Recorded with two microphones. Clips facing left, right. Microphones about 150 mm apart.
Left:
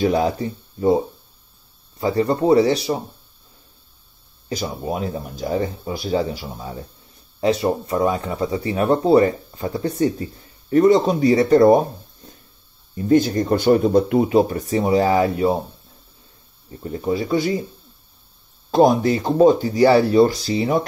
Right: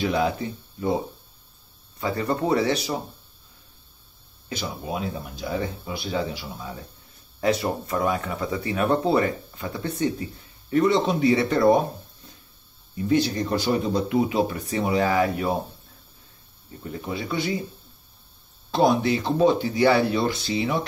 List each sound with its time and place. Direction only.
0.0 s speech: 40° left (ahead or behind)
2.0 s speech: 30° left (ahead or behind)
4.5 s speech: 40° left (ahead or behind)
12.9 s speech: 45° left (ahead or behind); by 15.5 s 30° left (ahead or behind)
16.8 s speech: 35° left (ahead or behind)
18.7 s speech: 45° left (ahead or behind)